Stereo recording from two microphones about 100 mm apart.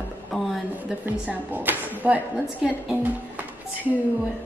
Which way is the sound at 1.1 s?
15° right (ahead or behind).